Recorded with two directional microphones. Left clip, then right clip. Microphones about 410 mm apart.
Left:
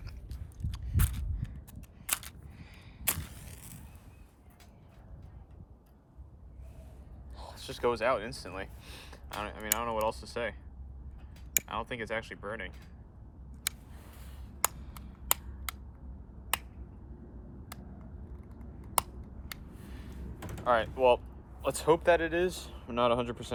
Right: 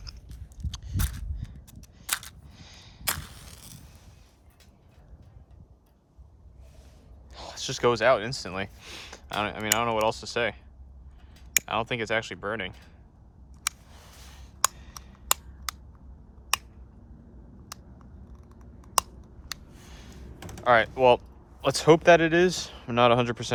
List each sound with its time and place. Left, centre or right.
0.0 s biting: centre
2.0 s single-lens reflex camera: centre
7.3 s speech: centre
11.6 s speech: centre
14.2 s a sound: centre
19.9 s a sound: centre
20.6 s speech: centre